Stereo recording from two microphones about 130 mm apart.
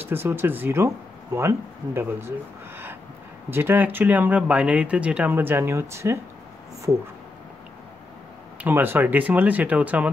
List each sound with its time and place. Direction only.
0.0 s speech: 15° right (ahead or behind)
3.4 s speech: 15° right (ahead or behind)
8.6 s speech: 15° right (ahead or behind)